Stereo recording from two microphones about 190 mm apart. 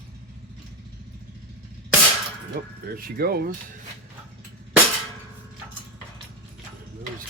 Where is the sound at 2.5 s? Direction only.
50° right (ahead or behind).